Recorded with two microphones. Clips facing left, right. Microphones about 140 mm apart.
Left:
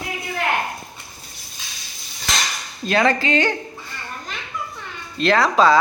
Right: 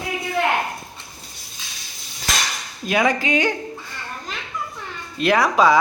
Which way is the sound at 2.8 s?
10° right (ahead or behind).